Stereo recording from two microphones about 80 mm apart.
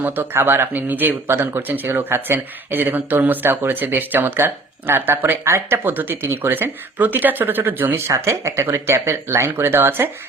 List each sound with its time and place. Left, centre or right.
0.0 s speech: right